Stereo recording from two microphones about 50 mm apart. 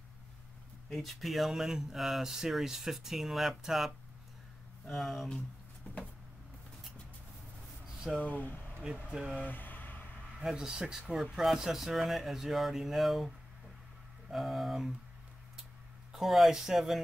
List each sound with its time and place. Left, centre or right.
0.9 s speech: centre
5.9 s vehicle: left
8.2 s speech: left
8.8 s speech: centre
9.4 s a sound: left
10.4 s speech: centre
14.3 s speech: centre
16.1 s speech: centre